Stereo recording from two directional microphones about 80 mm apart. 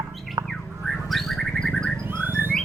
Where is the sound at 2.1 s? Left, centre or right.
Right.